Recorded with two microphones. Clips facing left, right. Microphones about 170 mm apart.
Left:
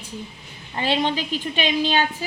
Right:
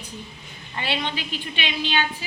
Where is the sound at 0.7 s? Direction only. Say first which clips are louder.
Left 6 dB; 40° left (ahead or behind).